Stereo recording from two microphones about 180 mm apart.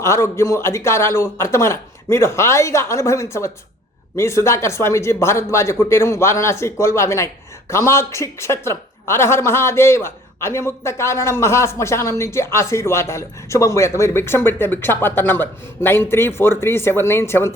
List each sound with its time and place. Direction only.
0.0 s a woman's voice: 15° left (ahead or behind)